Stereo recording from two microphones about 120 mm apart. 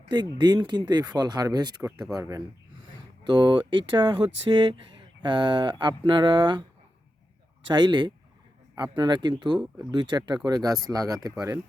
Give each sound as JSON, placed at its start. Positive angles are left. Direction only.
{"t": 0.1, "sound": "speech", "side_deg": -40}
{"t": 3.2, "sound": "speech", "side_deg": -40}